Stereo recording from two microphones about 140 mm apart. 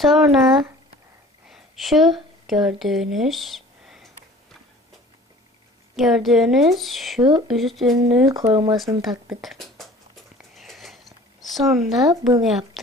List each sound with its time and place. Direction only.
0.0 s speech: centre (ahead or behind)
5.9 s a woman's voice: centre (ahead or behind)
8.3 s speech: 25° right (ahead or behind)
8.7 s a woman's voice: centre (ahead or behind)
10.5 s a sound: centre (ahead or behind)
11.4 s a woman's voice: centre (ahead or behind)